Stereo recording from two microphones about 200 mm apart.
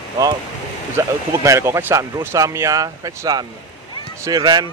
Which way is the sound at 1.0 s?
15° right (ahead or behind).